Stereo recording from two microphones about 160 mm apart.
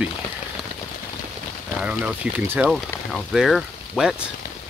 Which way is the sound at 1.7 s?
5° right (ahead or behind).